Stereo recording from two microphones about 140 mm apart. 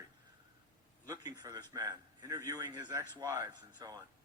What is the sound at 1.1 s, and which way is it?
A man's voice, 25° right (ahead or behind).